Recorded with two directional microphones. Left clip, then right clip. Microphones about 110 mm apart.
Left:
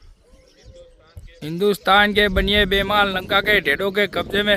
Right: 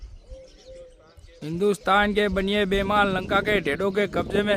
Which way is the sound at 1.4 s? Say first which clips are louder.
Left 4 dB; 35° left (ahead or behind).